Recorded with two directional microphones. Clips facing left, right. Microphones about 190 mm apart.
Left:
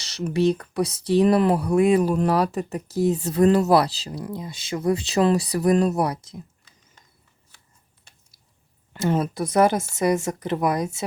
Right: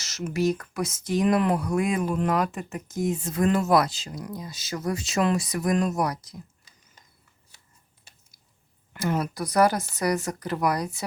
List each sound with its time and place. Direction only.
0.0 s speech: 35° left (ahead or behind)
8.9 s speech: 25° left (ahead or behind)